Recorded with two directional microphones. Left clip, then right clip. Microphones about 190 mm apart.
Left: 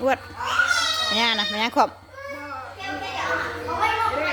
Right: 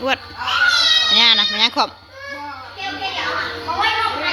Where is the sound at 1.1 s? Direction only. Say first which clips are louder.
Right 8 dB; 20° left (ahead or behind).